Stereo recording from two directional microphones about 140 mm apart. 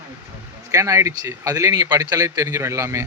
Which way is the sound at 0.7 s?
20° right (ahead or behind).